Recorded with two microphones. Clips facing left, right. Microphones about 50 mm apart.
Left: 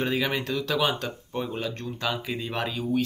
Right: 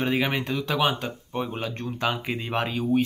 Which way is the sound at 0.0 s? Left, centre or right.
Right.